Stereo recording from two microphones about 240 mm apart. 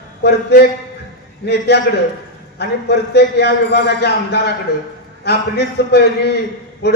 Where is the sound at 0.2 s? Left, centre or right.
Left.